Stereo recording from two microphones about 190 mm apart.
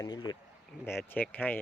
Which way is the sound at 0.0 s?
20° left (ahead or behind).